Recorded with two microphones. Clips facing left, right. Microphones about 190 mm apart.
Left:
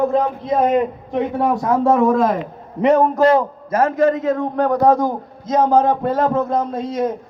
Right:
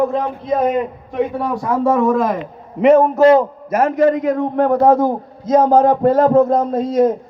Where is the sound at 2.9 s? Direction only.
5° right (ahead or behind).